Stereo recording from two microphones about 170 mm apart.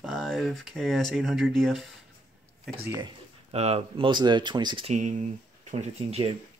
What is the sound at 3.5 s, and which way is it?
Speech, 35° right (ahead or behind).